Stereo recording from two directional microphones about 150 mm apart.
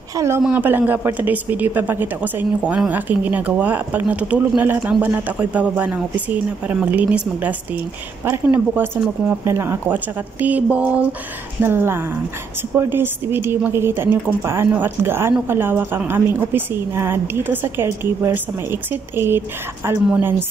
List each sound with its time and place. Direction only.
0.1 s speech: 20° right (ahead or behind)
0.4 s a woman's voice: 10° right (ahead or behind)